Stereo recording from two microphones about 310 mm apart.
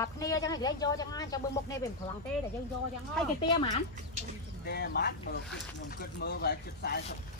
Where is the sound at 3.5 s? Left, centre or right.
Centre.